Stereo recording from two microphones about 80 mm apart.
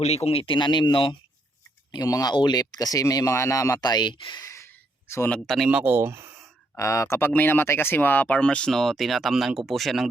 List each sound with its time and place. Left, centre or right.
0.4 s speech: left
2.0 s speech: left
2.3 s speech: left
4.4 s a sound: left
5.0 s speech: left
5.6 s speech: centre
5.9 s speech: right
6.7 s speech: left
7.2 s speech: left; by 10.1 s centre